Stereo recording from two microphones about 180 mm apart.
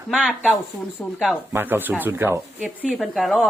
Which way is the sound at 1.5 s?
10° right (ahead or behind).